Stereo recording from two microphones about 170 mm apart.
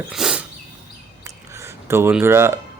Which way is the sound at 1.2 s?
15° right (ahead or behind).